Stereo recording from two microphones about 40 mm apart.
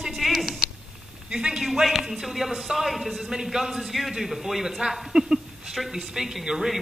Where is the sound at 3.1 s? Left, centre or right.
Centre.